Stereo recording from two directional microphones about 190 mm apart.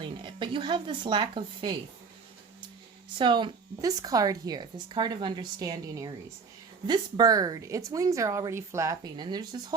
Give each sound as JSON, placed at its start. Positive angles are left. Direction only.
{"t": 0.0, "sound": "speech", "side_deg": -25}
{"t": 3.2, "sound": "speech", "side_deg": -25}